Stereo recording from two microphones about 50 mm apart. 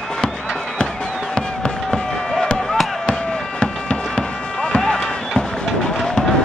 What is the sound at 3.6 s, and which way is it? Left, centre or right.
Music, centre.